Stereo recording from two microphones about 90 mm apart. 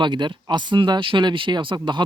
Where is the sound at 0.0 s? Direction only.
60° right (ahead or behind).